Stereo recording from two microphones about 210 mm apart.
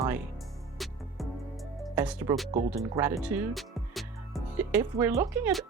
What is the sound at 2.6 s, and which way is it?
Speech, 35° right (ahead or behind).